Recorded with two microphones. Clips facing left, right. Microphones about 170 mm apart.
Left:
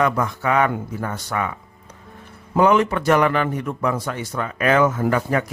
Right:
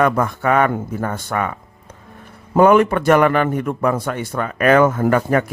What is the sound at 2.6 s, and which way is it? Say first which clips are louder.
A man's voice: right 4 dB; 55° right (ahead or behind).